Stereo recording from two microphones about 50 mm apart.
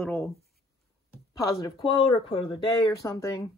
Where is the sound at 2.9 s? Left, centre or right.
Left.